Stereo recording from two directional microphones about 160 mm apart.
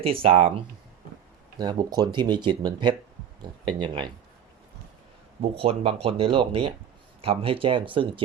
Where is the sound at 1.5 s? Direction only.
25° right (ahead or behind).